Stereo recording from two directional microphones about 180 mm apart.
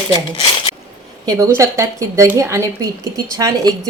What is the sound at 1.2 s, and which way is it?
A woman's voice, 20° right (ahead or behind).